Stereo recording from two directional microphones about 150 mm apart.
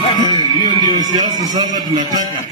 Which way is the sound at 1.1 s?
30° right (ahead or behind).